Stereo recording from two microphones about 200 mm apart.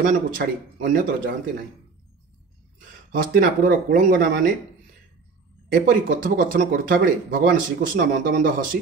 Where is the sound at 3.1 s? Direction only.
45° right (ahead or behind).